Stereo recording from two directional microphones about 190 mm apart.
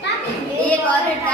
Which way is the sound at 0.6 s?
10° left (ahead or behind).